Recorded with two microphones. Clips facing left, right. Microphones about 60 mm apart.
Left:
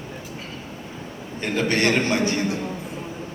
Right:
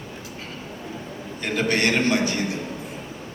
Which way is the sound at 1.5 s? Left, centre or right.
Left.